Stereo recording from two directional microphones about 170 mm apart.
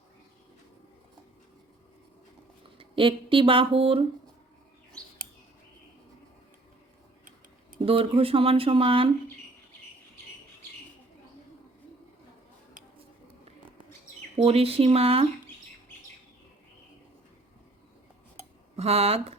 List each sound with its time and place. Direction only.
2.7 s speech: 30° right (ahead or behind)
7.8 s speech: 35° right (ahead or behind)
14.4 s speech: 35° right (ahead or behind)
18.8 s speech: 35° right (ahead or behind)